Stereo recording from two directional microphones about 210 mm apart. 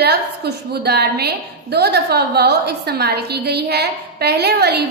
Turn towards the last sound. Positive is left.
turn(degrees=-50)  # may be behind; listen again after turning